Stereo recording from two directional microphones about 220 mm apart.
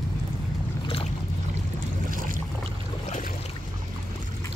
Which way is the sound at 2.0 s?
40° right (ahead or behind).